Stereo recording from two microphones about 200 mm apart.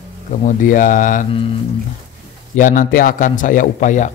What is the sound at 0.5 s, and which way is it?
Speech, 40° left (ahead or behind).